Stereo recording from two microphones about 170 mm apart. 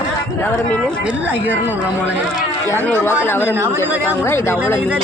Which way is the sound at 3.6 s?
15° right (ahead or behind).